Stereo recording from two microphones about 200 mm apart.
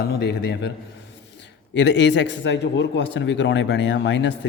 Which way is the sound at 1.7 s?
65° left (ahead or behind).